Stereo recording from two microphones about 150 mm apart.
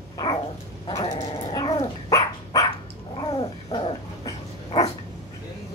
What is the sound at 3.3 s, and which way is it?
Dog, 40° left (ahead or behind).